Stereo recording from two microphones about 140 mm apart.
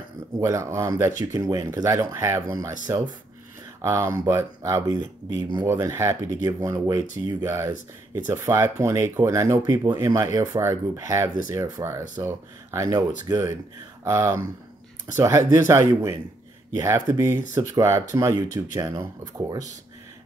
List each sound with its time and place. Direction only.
0.4 s speech: 20° right (ahead or behind)
3.8 s speech: 20° right (ahead or behind)